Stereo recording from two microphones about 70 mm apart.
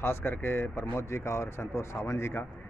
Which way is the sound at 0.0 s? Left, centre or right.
Left.